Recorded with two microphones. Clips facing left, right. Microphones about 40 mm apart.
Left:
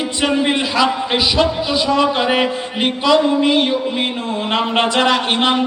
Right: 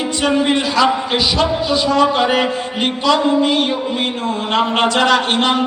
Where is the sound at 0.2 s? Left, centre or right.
Centre.